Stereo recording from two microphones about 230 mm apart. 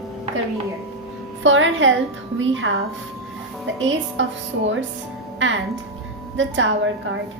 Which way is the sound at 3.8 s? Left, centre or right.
Right.